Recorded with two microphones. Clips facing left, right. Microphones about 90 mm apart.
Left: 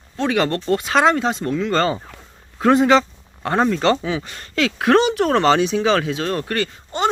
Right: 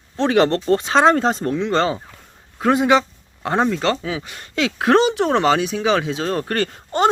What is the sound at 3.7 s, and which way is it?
Speech, centre (ahead or behind).